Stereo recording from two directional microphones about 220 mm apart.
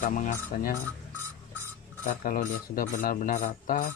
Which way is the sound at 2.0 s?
35° left (ahead or behind).